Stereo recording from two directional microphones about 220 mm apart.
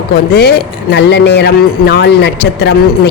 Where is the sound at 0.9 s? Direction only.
50° left (ahead or behind).